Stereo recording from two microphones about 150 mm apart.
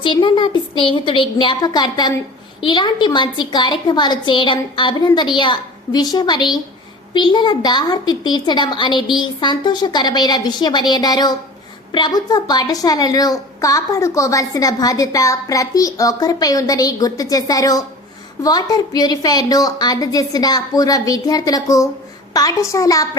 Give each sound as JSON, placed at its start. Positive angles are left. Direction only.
{"t": 0.0, "sound": "a woman's voice", "side_deg": 35}